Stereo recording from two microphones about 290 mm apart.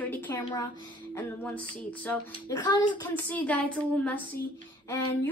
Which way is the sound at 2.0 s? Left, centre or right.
Centre.